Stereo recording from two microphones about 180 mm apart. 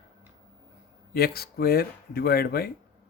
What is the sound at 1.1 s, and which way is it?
Speech, 60° left (ahead or behind).